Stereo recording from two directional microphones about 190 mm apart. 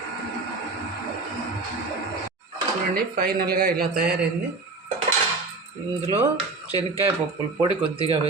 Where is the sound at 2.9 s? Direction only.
50° right (ahead or behind).